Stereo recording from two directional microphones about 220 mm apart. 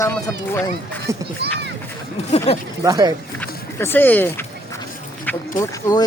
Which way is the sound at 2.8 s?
15° right (ahead or behind).